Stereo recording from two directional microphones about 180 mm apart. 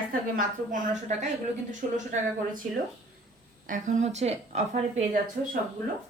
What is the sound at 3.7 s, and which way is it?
A woman's voice, 45° right (ahead or behind).